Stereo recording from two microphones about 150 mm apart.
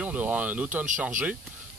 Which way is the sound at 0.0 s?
10° right (ahead or behind).